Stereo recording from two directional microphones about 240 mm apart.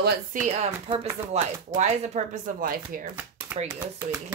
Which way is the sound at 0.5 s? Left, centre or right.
Right.